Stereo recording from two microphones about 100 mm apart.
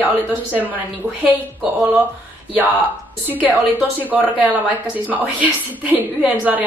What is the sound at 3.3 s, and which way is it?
A woman's voice, 15° right (ahead or behind).